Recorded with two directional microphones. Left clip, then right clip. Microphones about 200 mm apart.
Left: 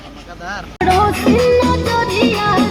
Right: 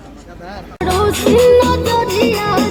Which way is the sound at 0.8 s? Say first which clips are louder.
Left 2 dB; 55° right (ahead or behind).